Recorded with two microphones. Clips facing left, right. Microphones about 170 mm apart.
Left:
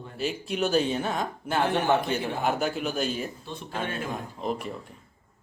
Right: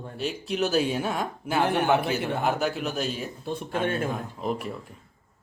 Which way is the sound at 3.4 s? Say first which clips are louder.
Right 6 dB; 55° right (ahead or behind).